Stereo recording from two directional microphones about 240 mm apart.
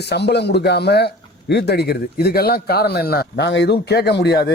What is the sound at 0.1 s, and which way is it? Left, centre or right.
A man's voice, left.